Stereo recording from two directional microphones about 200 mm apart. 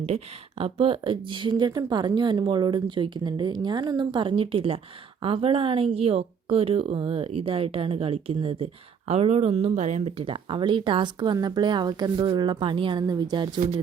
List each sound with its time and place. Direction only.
0.6 s speech: 25° right (ahead or behind)